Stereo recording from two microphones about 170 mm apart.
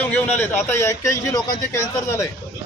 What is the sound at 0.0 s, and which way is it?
A man's voice, 10° left (ahead or behind).